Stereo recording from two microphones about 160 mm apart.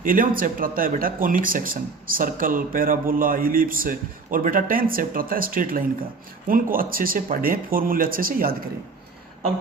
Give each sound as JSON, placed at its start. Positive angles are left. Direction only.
{"t": 0.0, "sound": "speech", "side_deg": -60}